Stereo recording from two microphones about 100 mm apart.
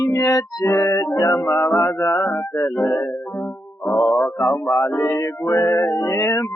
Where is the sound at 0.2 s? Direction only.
35° left (ahead or behind).